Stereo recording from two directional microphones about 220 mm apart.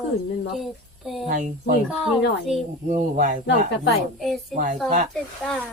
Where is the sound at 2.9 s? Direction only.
35° right (ahead or behind).